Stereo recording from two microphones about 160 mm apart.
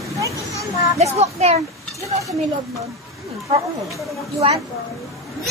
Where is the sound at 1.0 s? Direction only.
40° right (ahead or behind).